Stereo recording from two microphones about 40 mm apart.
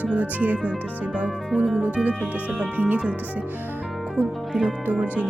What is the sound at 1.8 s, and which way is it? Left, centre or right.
Speech, right.